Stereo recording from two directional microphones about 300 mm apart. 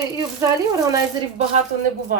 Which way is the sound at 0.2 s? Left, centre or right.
Centre.